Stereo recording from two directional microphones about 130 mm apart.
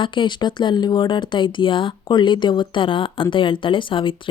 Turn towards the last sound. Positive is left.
turn(degrees=40)  # may be behind; listen again after turning